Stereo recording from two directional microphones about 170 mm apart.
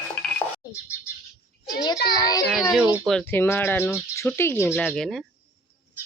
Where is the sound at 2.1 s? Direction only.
20° left (ahead or behind).